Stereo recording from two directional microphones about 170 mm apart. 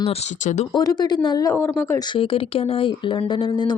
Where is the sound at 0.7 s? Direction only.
25° left (ahead or behind).